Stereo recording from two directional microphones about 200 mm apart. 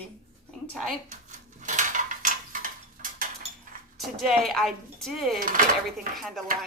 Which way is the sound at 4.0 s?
Centre (ahead or behind).